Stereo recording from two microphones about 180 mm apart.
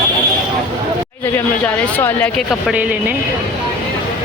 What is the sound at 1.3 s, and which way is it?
Speech, 10° left (ahead or behind).